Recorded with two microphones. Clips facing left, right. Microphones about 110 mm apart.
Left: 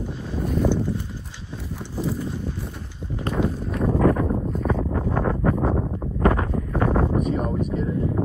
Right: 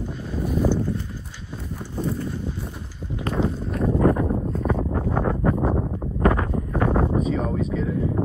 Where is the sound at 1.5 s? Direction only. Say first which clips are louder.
Even; centre (ahead or behind).